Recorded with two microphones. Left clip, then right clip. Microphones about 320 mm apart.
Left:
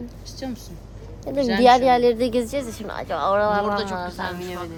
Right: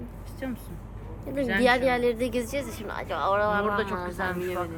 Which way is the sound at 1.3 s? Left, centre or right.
Left.